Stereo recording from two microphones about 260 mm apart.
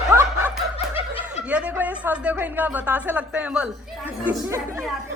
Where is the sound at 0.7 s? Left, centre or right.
Left.